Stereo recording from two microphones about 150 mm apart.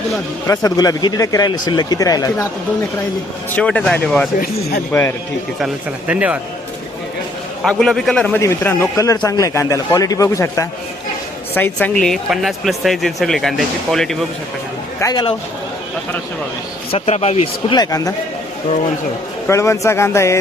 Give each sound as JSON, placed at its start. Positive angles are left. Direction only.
{"t": 0.4, "sound": "a man's voice", "side_deg": 25}
{"t": 3.5, "sound": "speech", "side_deg": 10}
{"t": 5.5, "sound": "speech", "side_deg": -5}
{"t": 7.6, "sound": "speech", "side_deg": 5}
{"t": 8.4, "sound": "a man's voice", "side_deg": 15}
{"t": 11.5, "sound": "speech", "side_deg": 10}
{"t": 15.0, "sound": "a man's voice", "side_deg": 30}
{"t": 16.9, "sound": "a man's voice", "side_deg": 45}
{"t": 19.5, "sound": "a man's voice", "side_deg": 20}